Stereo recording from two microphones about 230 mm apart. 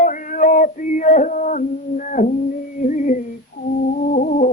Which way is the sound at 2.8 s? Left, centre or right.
Left.